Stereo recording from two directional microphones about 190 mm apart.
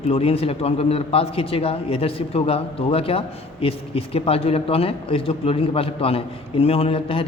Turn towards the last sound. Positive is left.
turn(degrees=30)  # may be behind; listen again after turning